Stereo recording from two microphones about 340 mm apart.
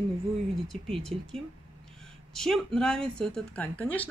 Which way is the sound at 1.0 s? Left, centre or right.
Centre.